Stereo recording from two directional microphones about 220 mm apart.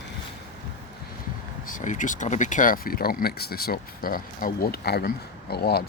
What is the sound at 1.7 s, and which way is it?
Speech, 35° left (ahead or behind).